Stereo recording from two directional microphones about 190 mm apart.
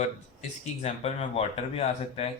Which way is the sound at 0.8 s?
35° left (ahead or behind).